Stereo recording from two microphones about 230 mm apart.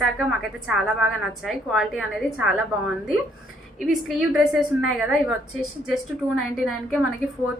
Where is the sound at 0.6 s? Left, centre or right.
Centre.